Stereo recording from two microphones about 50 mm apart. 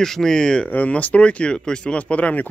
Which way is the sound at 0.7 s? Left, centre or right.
Left.